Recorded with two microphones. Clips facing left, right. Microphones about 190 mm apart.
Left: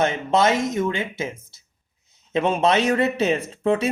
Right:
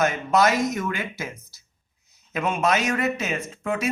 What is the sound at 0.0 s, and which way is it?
A man's voice, 30° left (ahead or behind).